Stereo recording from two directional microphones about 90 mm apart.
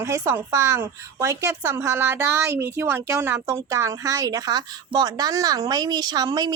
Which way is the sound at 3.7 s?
35° right (ahead or behind).